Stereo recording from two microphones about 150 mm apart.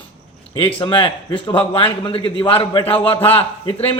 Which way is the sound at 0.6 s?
35° left (ahead or behind).